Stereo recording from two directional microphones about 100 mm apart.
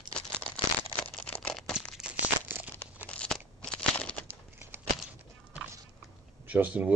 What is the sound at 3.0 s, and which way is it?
Crunch, 10° left (ahead or behind).